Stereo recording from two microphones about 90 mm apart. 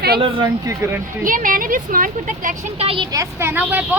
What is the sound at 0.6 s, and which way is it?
Speech, 30° right (ahead or behind).